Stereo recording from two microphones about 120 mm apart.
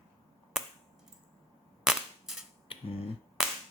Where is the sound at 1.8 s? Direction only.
5° right (ahead or behind).